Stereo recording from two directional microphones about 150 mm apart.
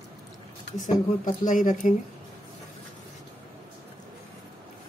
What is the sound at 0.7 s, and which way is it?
Speech, 55° left (ahead or behind).